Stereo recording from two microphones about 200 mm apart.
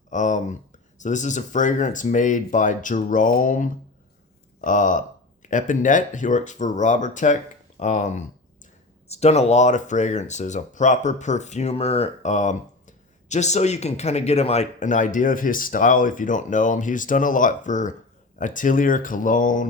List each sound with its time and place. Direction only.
0.1 s speech: 40° left (ahead or behind)